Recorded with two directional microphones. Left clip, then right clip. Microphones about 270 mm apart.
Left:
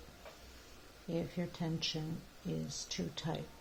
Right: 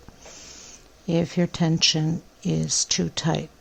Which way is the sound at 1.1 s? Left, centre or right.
Right.